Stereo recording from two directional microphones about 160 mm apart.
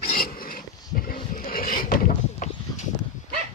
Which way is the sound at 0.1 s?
65° left (ahead or behind).